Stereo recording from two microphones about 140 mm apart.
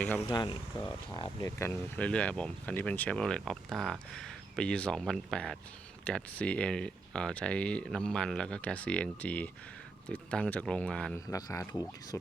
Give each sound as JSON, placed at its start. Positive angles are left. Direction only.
{"t": 0.0, "sound": "speech", "side_deg": 15}
{"t": 0.3, "sound": "speech", "side_deg": 30}
{"t": 2.0, "sound": "speech", "side_deg": 10}
{"t": 11.3, "sound": "speech", "side_deg": 25}